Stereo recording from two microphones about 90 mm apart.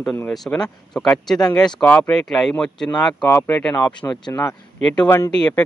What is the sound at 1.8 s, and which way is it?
Speech, 20° left (ahead or behind).